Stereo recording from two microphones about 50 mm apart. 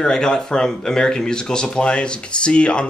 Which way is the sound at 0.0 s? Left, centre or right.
Centre.